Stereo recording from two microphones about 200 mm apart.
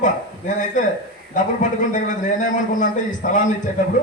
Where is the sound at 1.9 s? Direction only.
40° left (ahead or behind).